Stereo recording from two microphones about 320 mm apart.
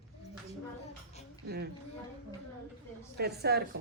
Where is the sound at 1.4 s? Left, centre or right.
Right.